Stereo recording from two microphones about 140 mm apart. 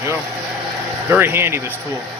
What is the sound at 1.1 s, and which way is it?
Speech, 15° right (ahead or behind).